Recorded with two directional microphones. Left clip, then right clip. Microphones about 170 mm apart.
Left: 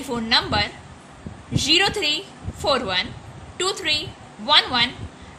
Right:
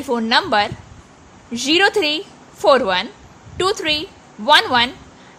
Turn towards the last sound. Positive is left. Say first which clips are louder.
# right 4 dB
turn(degrees=-40)  # may be behind; listen again after turning